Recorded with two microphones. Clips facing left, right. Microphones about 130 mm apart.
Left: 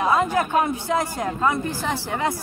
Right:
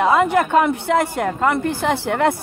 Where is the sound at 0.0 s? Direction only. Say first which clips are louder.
Right 5 dB; 65° right (ahead or behind).